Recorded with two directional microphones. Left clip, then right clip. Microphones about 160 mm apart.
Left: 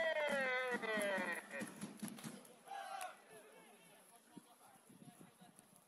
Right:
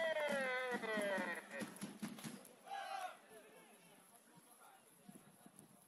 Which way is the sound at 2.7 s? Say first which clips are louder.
Right 2 dB; 20° right (ahead or behind).